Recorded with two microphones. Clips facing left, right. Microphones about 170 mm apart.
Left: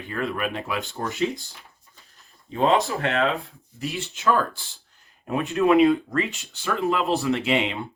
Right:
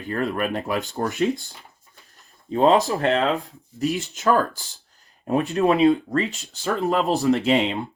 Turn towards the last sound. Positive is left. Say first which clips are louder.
# right 4 dB
turn(degrees=-35)  # may be behind; listen again after turning